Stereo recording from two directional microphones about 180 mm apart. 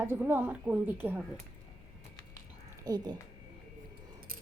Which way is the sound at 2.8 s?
20° right (ahead or behind).